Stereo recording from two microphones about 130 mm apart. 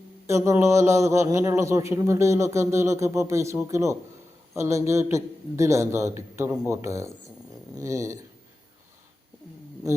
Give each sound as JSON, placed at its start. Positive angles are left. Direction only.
{"t": 0.3, "sound": "a man's voice", "side_deg": -20}